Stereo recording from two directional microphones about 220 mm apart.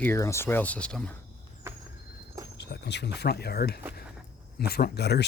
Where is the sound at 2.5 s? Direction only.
50° left (ahead or behind).